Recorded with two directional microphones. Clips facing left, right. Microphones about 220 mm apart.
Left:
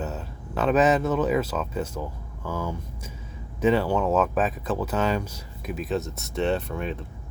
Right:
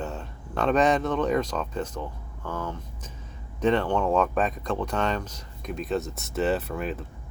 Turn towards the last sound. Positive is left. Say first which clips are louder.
# even
turn(degrees=-5)  # may be behind; listen again after turning